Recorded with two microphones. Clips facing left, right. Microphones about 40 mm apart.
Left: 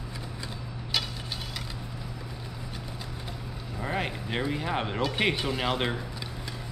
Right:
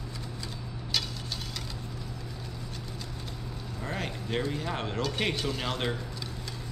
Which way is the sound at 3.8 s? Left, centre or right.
Left.